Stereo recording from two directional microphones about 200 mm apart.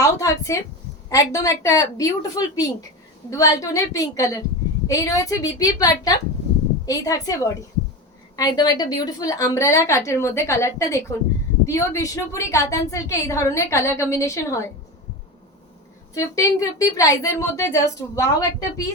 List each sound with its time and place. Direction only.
0.0 s a woman's voice: 15° left (ahead or behind)
16.1 s a woman's voice: 15° left (ahead or behind)